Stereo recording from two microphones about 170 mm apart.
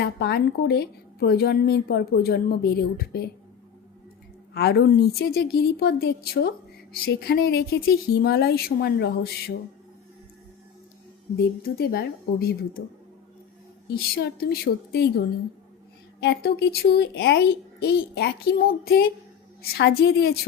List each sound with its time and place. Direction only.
0.0 s a woman's voice: 75° left (ahead or behind)
4.5 s a woman's voice: 80° left
11.6 s speech: 65° left (ahead or behind)
13.9 s speech: 65° left (ahead or behind)
16.2 s a woman's voice: 75° left (ahead or behind)